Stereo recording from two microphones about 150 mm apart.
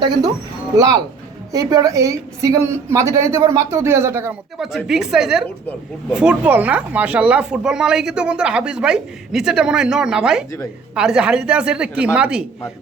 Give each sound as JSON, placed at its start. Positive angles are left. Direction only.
{"t": 0.0, "sound": "a woman's voice", "side_deg": -25}
{"t": 4.5, "sound": "speech", "side_deg": 0}